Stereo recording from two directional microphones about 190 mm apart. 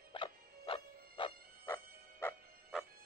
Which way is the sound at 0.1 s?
25° left (ahead or behind).